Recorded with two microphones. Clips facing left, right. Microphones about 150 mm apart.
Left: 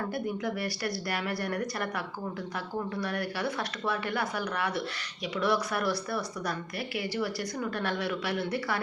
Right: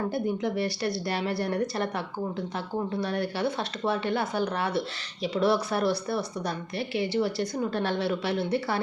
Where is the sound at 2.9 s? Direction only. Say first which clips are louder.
Right 4 dB; 25° right (ahead or behind).